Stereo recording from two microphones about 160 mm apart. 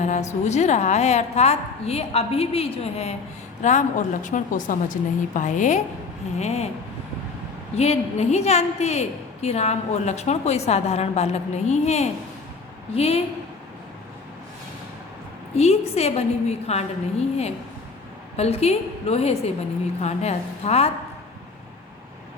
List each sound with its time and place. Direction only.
0.0 s a woman's voice: 45° left (ahead or behind)
7.8 s a woman's voice: 40° left (ahead or behind)
15.5 s a woman's voice: 40° left (ahead or behind)